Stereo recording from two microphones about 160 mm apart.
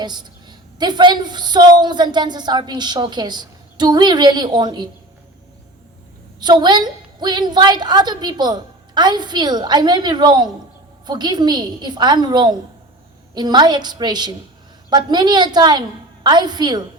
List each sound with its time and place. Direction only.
0.0 s a woman's voice: 25° right (ahead or behind)
6.4 s a woman's voice: 25° right (ahead or behind)